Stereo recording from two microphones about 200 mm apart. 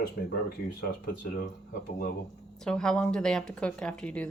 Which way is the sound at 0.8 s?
50° left (ahead or behind).